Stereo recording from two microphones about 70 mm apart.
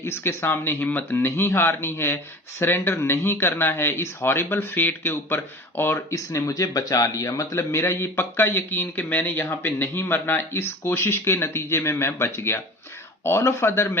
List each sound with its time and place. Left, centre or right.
0.0 s a man's voice: left
6.1 s a man's voice: left